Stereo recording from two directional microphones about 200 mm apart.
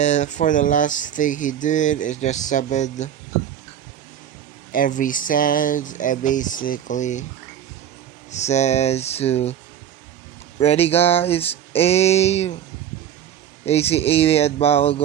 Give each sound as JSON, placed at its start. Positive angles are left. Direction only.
{"t": 0.0, "sound": "speech", "side_deg": 35}
{"t": 4.7, "sound": "speech", "side_deg": 40}
{"t": 8.3, "sound": "speech", "side_deg": 35}
{"t": 10.6, "sound": "speech", "side_deg": 30}
{"t": 13.7, "sound": "speech", "side_deg": 30}